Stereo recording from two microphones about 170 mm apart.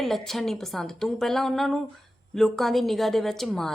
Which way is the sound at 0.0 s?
Centre (ahead or behind).